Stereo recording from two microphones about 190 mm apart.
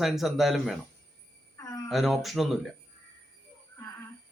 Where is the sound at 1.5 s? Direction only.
15° left (ahead or behind).